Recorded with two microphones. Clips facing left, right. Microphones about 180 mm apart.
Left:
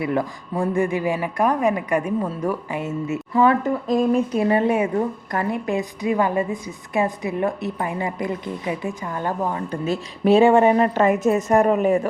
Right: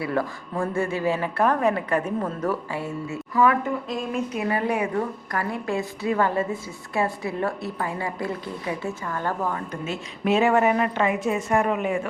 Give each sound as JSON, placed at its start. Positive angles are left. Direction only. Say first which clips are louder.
{"t": 0.0, "sound": "a woman's voice", "louder": "left 3 dB", "side_deg": 20}
{"t": 9.8, "sound": "a woman's voice", "louder": "left 7 dB", "side_deg": 35}